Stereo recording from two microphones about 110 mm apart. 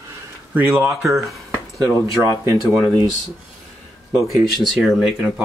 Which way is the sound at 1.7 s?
30° right (ahead or behind).